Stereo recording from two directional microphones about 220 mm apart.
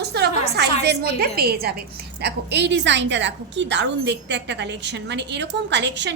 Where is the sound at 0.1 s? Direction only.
50° right (ahead or behind).